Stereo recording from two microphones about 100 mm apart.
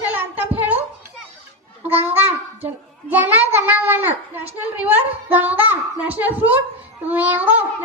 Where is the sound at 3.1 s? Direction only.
15° right (ahead or behind).